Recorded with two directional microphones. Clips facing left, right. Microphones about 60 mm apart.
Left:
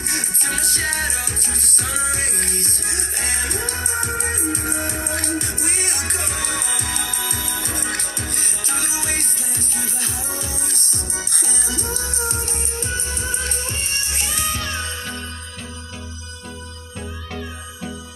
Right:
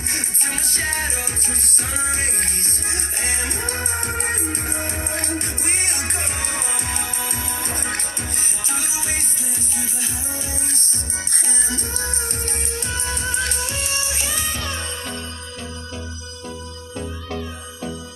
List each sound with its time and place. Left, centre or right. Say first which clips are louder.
0.1 s music: left 2 dB; right
8.4 s music: left 1 dB; centre
11.1 s music: right 2 dB; right